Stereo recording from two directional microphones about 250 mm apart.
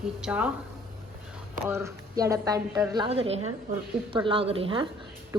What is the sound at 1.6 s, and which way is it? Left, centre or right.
Speech, centre.